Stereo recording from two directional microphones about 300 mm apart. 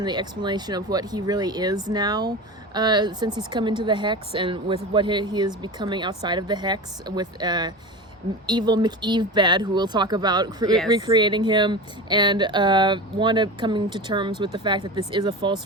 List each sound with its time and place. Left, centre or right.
0.0 s speech: centre